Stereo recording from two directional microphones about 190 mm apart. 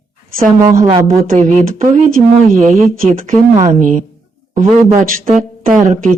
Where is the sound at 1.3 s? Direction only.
40° right (ahead or behind).